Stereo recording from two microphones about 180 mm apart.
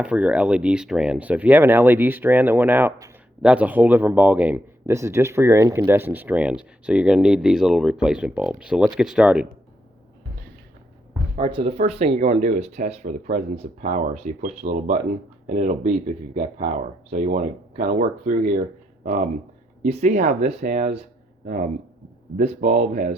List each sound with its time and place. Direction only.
0.0 s speech: 5° right (ahead or behind)
11.3 s speech: 30° right (ahead or behind); by 18.6 s 45° right (ahead or behind)
19.8 s speech: 40° right (ahead or behind)